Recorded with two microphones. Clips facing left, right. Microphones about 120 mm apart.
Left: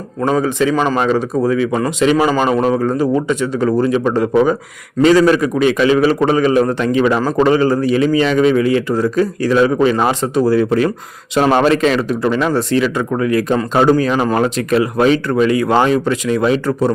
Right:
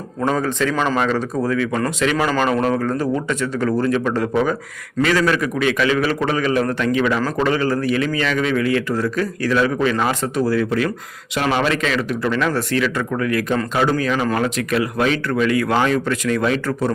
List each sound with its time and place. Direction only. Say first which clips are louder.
0.2 s a man's voice: left 4 dB; 10° left (ahead or behind); by 10.9 s 30° left (ahead or behind)
11.3 s a man's voice: left 7 dB; 40° left (ahead or behind); by 16.9 s 20° left (ahead or behind)